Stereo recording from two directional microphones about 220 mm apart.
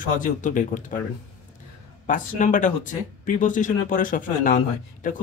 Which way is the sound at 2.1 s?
35° left (ahead or behind).